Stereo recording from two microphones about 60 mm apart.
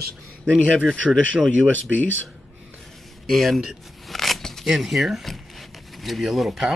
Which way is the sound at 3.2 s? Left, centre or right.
Centre.